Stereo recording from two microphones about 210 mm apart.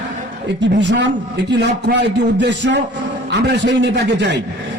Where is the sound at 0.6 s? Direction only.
55° right (ahead or behind).